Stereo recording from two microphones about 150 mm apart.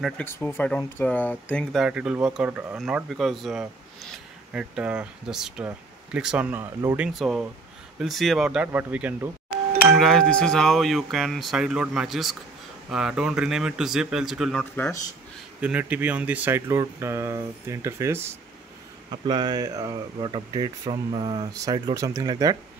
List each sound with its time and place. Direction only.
0.2 s speech: 15° left (ahead or behind); by 7.1 s 15° right (ahead or behind)
7.1 s speech: centre (ahead or behind)
15.6 s speech: 10° right (ahead or behind)
19.0 s speech: 30° right (ahead or behind)